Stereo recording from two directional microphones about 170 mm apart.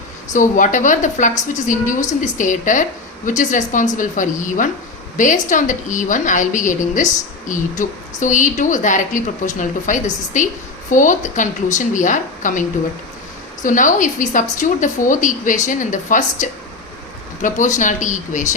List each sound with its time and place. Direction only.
0.3 s a woman's voice: 50° left (ahead or behind)